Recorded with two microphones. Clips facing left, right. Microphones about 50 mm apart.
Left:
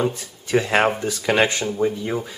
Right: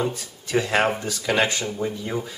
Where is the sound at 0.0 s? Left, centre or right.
Centre.